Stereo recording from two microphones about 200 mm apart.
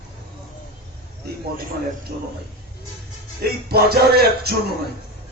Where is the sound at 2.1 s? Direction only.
45° right (ahead or behind).